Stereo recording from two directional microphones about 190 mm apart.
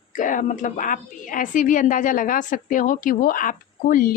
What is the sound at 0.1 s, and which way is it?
Speech, 45° left (ahead or behind).